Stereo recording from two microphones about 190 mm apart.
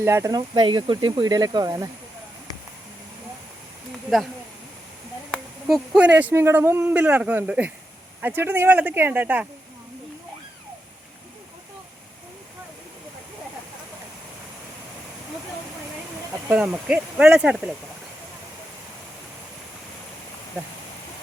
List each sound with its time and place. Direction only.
0.0 s speech: 15° right (ahead or behind)
5.3 s speech: centre (ahead or behind)
16.5 s speech: 5° right (ahead or behind)